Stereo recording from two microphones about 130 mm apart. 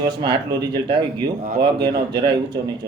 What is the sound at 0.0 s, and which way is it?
Speech, 35° right (ahead or behind).